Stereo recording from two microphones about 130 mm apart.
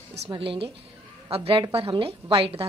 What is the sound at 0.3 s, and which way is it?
A woman's voice, 45° right (ahead or behind).